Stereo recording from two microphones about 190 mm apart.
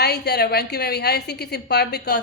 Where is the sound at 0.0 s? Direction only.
60° left (ahead or behind).